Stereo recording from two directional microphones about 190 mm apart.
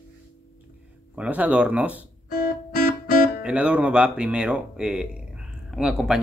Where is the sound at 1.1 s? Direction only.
5° right (ahead or behind).